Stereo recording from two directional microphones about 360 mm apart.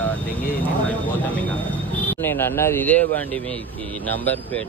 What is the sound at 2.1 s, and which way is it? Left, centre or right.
Speech, centre.